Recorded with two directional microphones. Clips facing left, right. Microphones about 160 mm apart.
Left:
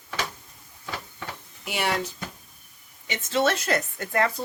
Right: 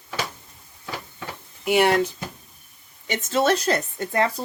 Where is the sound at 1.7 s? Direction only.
55° right (ahead or behind).